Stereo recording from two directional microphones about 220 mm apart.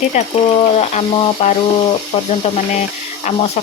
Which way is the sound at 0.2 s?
30° left (ahead or behind).